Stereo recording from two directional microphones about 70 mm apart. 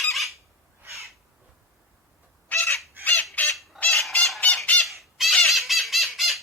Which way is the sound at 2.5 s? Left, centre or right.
Left.